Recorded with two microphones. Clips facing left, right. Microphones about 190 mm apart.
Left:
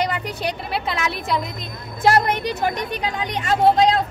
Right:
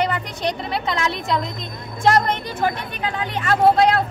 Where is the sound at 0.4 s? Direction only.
5° left (ahead or behind).